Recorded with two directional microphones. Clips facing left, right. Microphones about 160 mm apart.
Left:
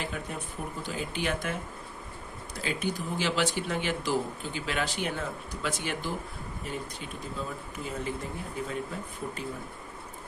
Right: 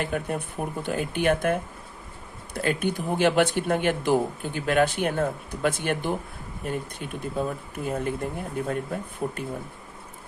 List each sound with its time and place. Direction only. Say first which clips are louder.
0.0 s speech: right 7 dB; 55° right (ahead or behind)
2.6 s speech: right 6 dB; 55° right (ahead or behind)